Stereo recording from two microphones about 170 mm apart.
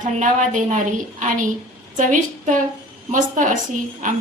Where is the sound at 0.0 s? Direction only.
50° right (ahead or behind).